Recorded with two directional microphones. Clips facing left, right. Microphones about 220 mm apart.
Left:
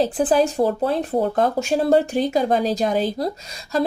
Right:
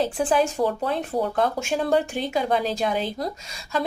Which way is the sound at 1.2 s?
40° left (ahead or behind).